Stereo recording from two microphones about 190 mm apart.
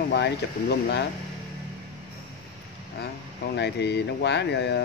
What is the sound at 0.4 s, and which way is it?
Speech, 60° left (ahead or behind).